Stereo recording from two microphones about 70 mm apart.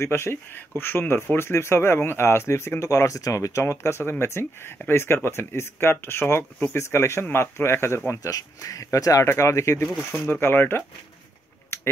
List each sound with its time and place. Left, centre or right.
0.0 s speech: left
8.2 s speech: left
10.4 s speech: left